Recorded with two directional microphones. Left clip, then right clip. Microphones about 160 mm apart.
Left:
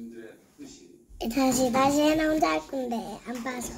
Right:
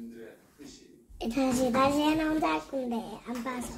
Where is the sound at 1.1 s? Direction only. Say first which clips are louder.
Left 4 dB; 60° left (ahead or behind).